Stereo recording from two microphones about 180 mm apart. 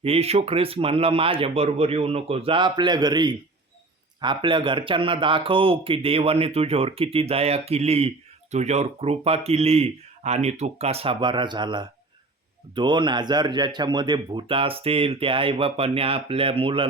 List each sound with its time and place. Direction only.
0.0 s a man's voice: 35° right (ahead or behind)